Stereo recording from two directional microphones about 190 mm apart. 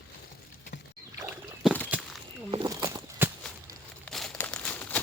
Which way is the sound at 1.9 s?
10° right (ahead or behind).